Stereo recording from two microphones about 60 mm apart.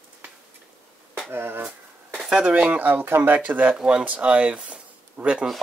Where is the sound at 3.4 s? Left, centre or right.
Right.